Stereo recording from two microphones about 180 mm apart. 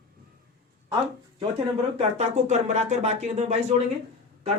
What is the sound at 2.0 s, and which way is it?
A woman's voice, 40° right (ahead or behind).